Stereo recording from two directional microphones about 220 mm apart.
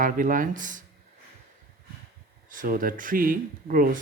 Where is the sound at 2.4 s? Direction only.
40° right (ahead or behind).